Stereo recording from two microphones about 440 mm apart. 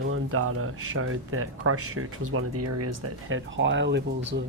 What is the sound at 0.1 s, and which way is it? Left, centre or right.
Speech, right.